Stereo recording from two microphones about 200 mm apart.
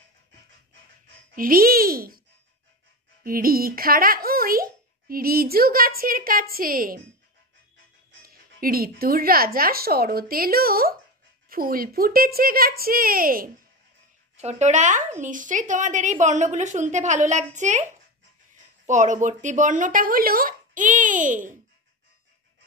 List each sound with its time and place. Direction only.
1.3 s a child's voice: 45° right (ahead or behind)
3.3 s a child's voice: 45° right (ahead or behind)
8.3 s a child's voice: 45° right (ahead or behind)
14.3 s speech: 35° right (ahead or behind)
18.9 s speech: 40° right (ahead or behind)